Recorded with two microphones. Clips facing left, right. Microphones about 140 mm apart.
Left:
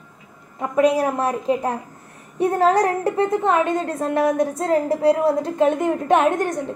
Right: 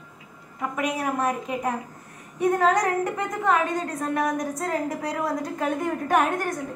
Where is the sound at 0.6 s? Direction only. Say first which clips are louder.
Left 10 dB; 30° left (ahead or behind).